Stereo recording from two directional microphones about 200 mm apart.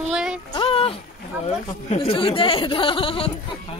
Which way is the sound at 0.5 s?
30° left (ahead or behind).